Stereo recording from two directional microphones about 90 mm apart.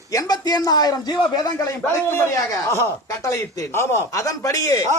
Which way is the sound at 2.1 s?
30° left (ahead or behind).